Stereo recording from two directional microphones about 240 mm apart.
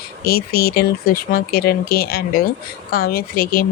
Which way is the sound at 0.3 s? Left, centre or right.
Left.